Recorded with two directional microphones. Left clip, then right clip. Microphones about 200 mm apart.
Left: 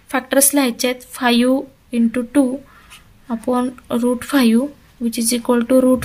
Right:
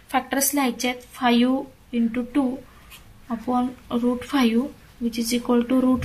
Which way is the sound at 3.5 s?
55° left (ahead or behind).